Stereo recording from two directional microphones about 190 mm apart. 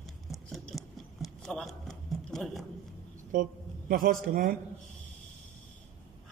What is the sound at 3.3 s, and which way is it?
A man's voice, 45° right (ahead or behind).